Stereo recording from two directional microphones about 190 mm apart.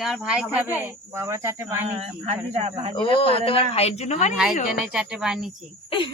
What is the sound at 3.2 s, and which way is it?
Speech, 30° left (ahead or behind).